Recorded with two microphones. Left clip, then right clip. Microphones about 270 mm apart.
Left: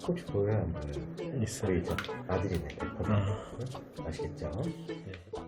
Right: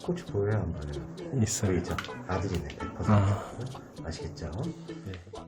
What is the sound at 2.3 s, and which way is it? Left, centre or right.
Speech, centre.